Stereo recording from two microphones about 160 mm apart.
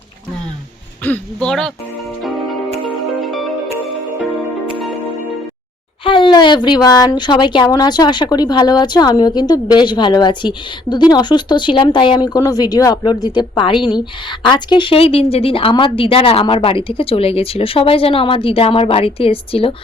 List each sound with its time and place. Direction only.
1.0 s speech: 10° left (ahead or behind)
3.2 s music: centre (ahead or behind)
6.1 s speech: 30° left (ahead or behind)